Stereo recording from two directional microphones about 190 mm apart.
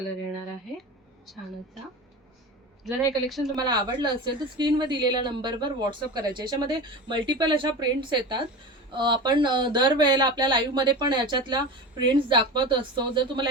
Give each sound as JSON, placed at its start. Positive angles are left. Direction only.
{"t": 1.3, "sound": "speech", "side_deg": 0}
{"t": 2.8, "sound": "speech", "side_deg": 0}
{"t": 3.5, "sound": "speech", "side_deg": -20}